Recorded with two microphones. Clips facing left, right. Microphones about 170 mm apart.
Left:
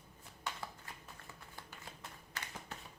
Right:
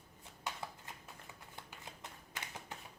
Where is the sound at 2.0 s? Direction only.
15° right (ahead or behind).